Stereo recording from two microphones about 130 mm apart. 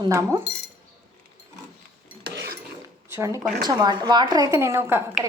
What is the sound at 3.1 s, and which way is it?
Speech, 20° right (ahead or behind).